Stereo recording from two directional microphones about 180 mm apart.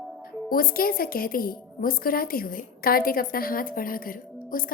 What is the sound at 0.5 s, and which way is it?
A woman's voice, 55° left (ahead or behind).